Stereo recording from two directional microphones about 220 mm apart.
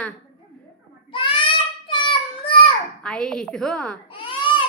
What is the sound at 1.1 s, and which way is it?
Child singing, 20° left (ahead or behind).